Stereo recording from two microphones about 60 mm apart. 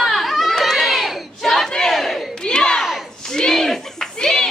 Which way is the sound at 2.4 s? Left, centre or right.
Centre.